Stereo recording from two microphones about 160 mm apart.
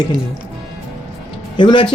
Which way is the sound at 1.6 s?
30° left (ahead or behind).